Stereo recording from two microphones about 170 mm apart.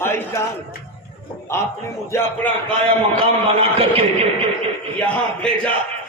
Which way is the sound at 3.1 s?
35° right (ahead or behind).